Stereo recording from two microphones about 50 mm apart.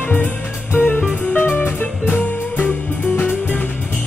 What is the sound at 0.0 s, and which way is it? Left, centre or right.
Music, left.